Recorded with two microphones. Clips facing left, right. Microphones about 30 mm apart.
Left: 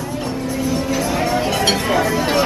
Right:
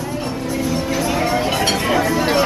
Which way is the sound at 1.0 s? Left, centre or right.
Centre.